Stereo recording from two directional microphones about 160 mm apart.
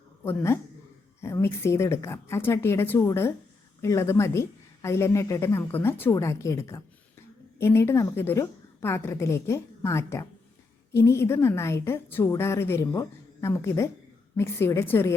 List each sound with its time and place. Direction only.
0.3 s a woman's voice: 15° left (ahead or behind)